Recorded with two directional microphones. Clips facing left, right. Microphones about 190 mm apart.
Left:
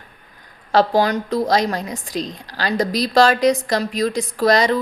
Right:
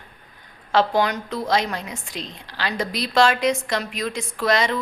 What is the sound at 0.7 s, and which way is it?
A woman's voice, 40° left (ahead or behind).